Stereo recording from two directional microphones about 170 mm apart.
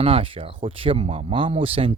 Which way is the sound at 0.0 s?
35° right (ahead or behind).